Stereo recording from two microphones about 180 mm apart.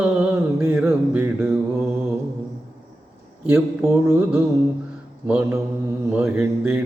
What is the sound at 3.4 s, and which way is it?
Mantra, 10° right (ahead or behind).